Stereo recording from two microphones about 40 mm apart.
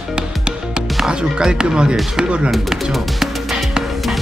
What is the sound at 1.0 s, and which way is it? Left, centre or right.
Speech, right.